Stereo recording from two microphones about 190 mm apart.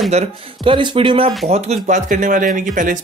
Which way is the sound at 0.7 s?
25° right (ahead or behind).